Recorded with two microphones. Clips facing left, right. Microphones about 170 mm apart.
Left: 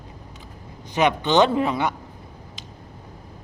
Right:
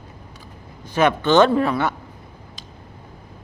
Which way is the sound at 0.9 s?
20° left (ahead or behind).